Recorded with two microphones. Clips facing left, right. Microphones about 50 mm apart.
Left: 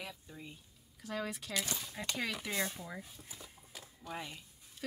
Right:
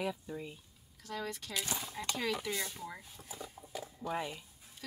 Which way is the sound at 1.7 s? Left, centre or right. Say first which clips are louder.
Right 2 dB; right.